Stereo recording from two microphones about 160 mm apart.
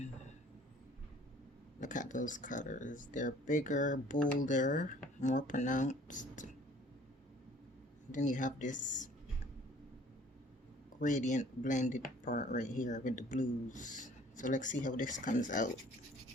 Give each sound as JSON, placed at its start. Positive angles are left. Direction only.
{"t": 0.0, "sound": "a sound", "side_deg": 45}
{"t": 1.8, "sound": "speech", "side_deg": 50}
{"t": 8.1, "sound": "speech", "side_deg": 55}
{"t": 11.0, "sound": "speech", "side_deg": 50}